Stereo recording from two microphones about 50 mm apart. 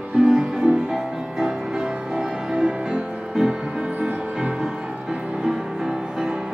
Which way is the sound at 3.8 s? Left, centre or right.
Right.